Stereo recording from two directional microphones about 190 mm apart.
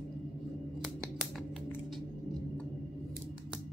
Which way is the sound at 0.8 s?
Centre (ahead or behind).